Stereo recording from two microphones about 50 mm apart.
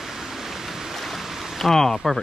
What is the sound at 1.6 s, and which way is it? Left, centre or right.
Speech, centre.